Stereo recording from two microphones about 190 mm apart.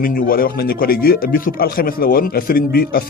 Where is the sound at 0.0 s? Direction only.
50° left (ahead or behind).